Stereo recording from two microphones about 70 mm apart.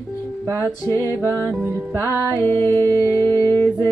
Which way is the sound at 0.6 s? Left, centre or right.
Left.